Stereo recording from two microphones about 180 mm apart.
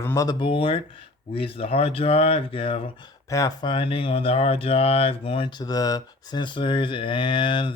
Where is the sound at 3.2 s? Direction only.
20° left (ahead or behind).